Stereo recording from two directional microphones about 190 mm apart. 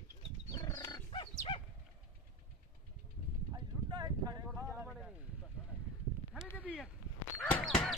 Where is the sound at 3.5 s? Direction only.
20° right (ahead or behind).